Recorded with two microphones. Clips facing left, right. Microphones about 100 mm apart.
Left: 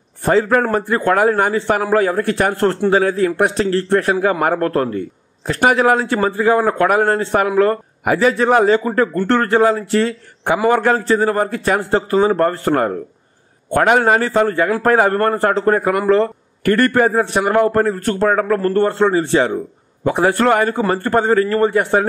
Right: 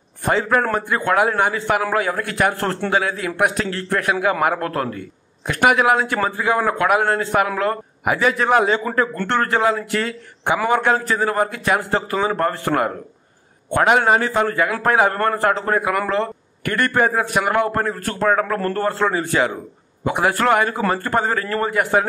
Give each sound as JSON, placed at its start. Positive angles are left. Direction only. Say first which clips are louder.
{"t": 0.2, "sound": "a man's voice", "louder": "left 4 dB", "side_deg": 40}
{"t": 15.3, "sound": "a man's voice", "louder": "left 4 dB", "side_deg": 30}